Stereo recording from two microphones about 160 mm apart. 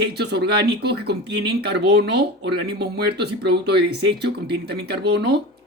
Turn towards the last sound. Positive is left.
turn(degrees=-90)